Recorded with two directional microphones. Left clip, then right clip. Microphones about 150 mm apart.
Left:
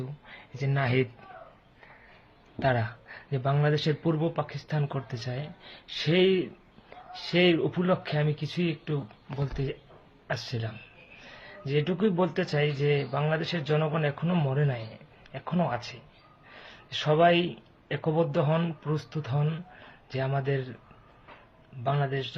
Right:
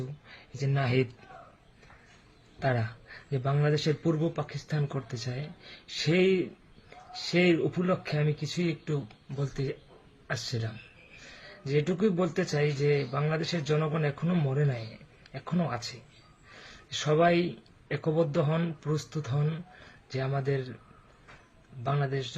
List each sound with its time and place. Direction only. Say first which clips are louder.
0.6 s speech: left 1 dB; 20° right (ahead or behind)
2.6 s speech: left 3 dB; 25° right (ahead or behind)
6.9 s a sound: right 1 dB; 30° right (ahead or behind)
7.3 s speech: left 2 dB; 30° right (ahead or behind)
9.4 s speech: even; 35° right (ahead or behind)
11.3 s a sound: left 1 dB; 35° right (ahead or behind)
11.8 s speech: left 1 dB; 30° right (ahead or behind)
16.6 s a sound: left 2 dB; 30° right (ahead or behind)
17.8 s speech: left 1 dB; 30° right (ahead or behind)
21.8 s speech: left 2 dB; 30° right (ahead or behind)